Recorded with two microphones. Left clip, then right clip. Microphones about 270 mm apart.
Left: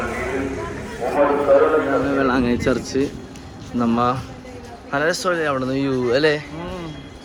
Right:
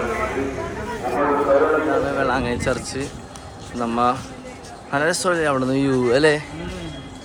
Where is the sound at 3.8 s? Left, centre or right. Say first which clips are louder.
Even; centre.